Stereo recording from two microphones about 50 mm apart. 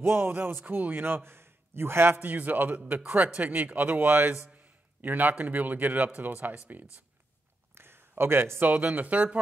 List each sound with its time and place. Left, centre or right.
0.0 s a man's voice: right
2.1 s a man's voice: right
7.7 s a sound: right
8.2 s speech: right